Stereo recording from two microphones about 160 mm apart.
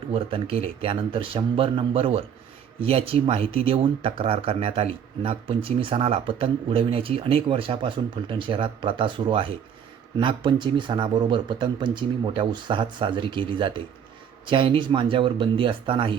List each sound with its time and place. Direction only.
0.1 s speech: 35° right (ahead or behind)